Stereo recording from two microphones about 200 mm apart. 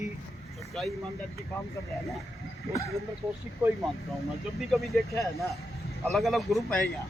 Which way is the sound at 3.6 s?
Centre (ahead or behind).